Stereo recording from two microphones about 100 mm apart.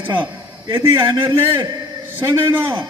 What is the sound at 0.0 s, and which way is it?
A man's voice, 20° right (ahead or behind).